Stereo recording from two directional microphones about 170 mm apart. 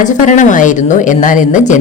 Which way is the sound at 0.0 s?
45° left (ahead or behind).